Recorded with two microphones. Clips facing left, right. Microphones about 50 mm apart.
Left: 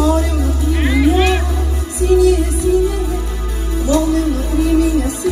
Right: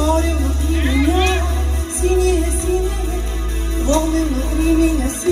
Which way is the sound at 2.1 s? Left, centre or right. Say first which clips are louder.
Left 4 dB; right.